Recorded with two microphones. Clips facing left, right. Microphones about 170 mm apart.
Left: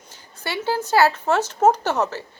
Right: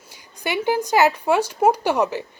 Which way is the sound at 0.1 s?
15° right (ahead or behind).